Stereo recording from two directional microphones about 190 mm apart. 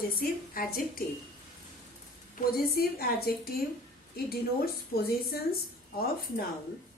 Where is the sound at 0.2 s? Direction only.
50° left (ahead or behind).